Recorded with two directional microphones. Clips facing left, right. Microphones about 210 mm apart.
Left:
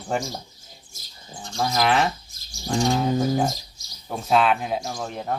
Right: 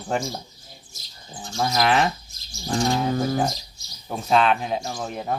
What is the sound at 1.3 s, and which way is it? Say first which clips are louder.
Speech: right 1 dB; 5° right (ahead or behind).